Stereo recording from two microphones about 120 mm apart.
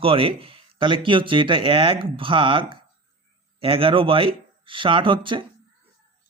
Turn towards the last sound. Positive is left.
turn(degrees=-45)  # may be behind; listen again after turning